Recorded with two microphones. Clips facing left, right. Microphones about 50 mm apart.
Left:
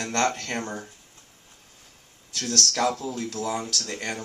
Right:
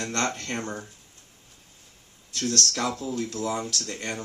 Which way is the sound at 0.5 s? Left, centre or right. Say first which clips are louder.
Left 1 dB; left.